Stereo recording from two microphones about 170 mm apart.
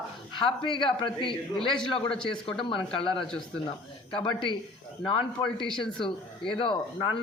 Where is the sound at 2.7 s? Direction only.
30° left (ahead or behind).